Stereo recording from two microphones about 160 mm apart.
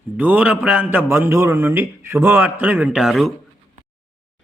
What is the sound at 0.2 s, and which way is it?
A man's voice, 10° right (ahead or behind).